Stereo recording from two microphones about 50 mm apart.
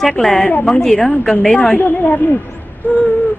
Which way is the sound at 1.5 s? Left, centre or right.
Left.